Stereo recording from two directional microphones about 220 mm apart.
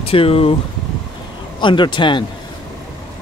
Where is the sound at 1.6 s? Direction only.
20° left (ahead or behind).